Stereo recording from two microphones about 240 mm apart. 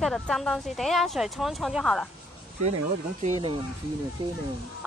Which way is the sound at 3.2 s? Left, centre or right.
Right.